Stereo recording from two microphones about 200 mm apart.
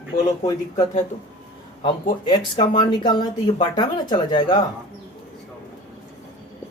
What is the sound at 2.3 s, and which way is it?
Speech, 25° left (ahead or behind).